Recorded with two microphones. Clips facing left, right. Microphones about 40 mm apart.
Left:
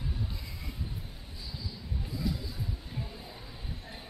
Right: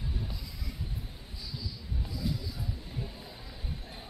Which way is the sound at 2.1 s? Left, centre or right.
Left.